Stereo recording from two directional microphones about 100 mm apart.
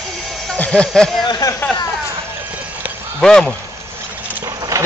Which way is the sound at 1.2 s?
45° left (ahead or behind).